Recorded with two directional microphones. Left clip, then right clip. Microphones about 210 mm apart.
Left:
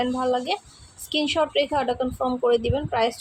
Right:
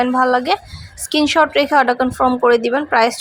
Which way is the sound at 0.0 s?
20° right (ahead or behind).